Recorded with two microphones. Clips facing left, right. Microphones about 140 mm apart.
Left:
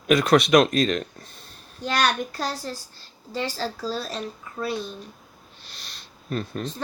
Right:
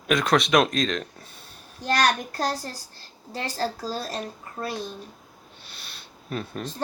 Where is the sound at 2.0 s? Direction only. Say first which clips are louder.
Even; 45° right (ahead or behind).